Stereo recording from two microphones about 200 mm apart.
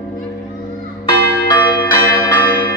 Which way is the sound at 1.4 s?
20° left (ahead or behind).